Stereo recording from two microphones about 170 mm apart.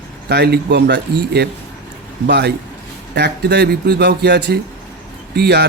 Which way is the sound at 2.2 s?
80° right.